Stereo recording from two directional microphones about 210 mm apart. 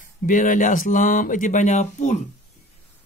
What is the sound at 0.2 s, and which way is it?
Speech, 40° left (ahead or behind).